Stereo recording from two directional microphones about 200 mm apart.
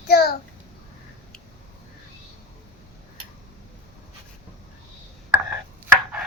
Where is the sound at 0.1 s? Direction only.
50° left (ahead or behind).